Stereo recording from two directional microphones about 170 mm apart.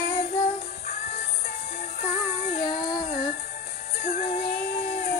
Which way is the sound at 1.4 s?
50° left (ahead or behind).